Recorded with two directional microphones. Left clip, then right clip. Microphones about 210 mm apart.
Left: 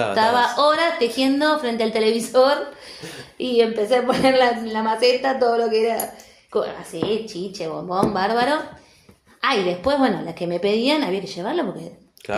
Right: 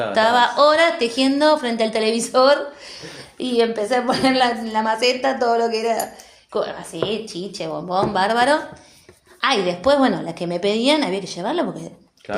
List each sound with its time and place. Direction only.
0.1 s a woman's voice: 30° right (ahead or behind)
12.3 s speech: 45° left (ahead or behind)